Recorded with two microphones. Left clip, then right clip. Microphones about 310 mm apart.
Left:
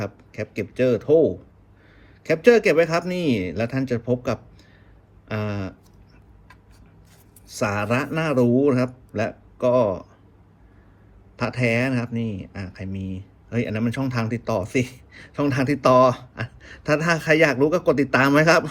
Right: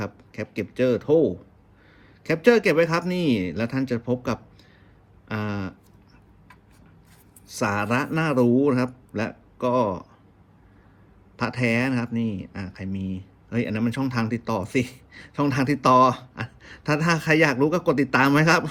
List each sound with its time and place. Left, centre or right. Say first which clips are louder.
0.0 s a man's voice: left 2 dB; centre
7.4 s a man's voice: left 1 dB; centre
11.3 s a man's voice: left 2 dB; centre